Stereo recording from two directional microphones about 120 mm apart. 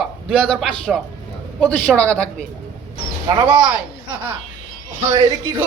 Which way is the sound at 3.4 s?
10° right (ahead or behind).